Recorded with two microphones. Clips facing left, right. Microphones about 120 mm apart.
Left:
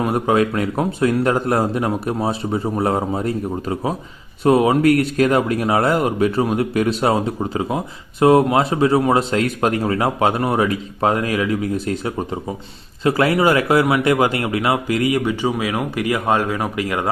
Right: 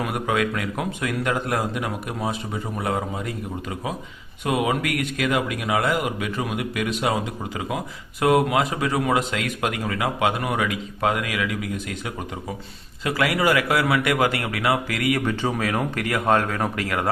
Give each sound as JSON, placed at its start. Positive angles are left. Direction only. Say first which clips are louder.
{"t": 0.0, "sound": "speech", "louder": "left 6 dB", "side_deg": 35}